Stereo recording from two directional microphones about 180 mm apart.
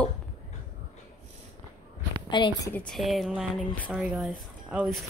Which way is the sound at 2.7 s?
5° left (ahead or behind).